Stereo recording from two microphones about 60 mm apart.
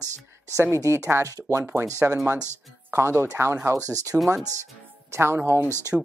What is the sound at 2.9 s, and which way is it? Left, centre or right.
Speech, right.